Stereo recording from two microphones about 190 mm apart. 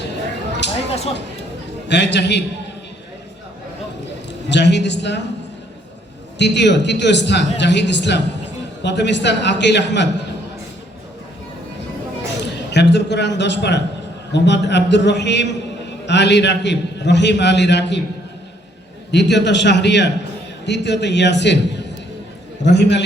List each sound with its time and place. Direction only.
0.0 s a sound: 65° left (ahead or behind)
1.9 s a man's voice: 65° left (ahead or behind)
4.3 s a woman's voice: 65° left (ahead or behind)
6.4 s a man's voice: 65° left (ahead or behind)
12.7 s a man's voice: 65° left (ahead or behind)
19.1 s a man's voice: 65° left (ahead or behind)